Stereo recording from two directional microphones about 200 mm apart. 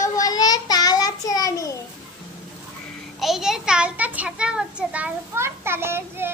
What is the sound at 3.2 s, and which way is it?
Child singing, centre (ahead or behind).